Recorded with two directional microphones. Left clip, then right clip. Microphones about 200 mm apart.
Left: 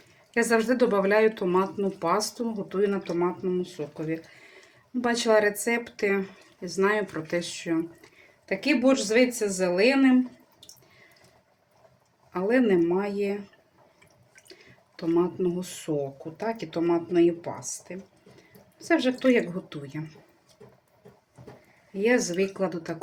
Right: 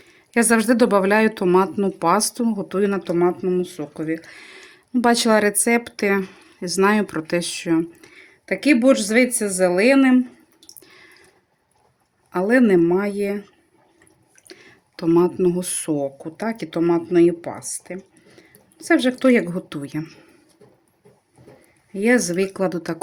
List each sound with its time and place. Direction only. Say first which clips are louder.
0.3 s speech: right 6 dB; 65° right (ahead or behind)
12.3 s speech: right 6 dB; 65° right (ahead or behind)
14.4 s drip: right 8 dB; 60° right (ahead or behind)
16.4 s speech: right 6 dB; 60° right (ahead or behind)
21.9 s speech: right 5 dB; 60° right (ahead or behind)